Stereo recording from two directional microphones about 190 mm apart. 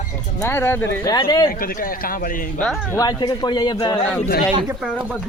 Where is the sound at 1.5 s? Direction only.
50° left (ahead or behind).